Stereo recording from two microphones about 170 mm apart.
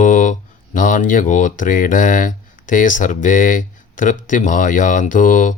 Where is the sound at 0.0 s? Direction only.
50° left (ahead or behind).